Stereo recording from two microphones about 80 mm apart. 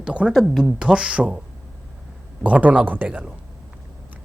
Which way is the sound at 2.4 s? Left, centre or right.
Centre.